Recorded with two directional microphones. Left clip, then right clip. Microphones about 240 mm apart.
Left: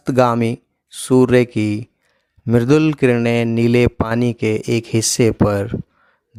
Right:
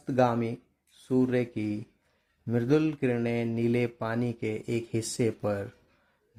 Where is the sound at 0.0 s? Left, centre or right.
Left.